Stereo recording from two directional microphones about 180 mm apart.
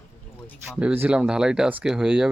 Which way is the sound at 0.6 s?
10° right (ahead or behind).